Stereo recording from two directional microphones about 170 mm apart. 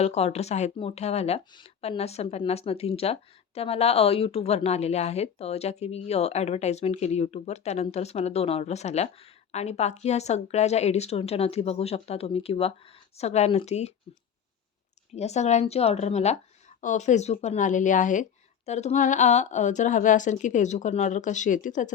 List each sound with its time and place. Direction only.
0.0 s speech: 40° left (ahead or behind)
15.1 s speech: 40° left (ahead or behind)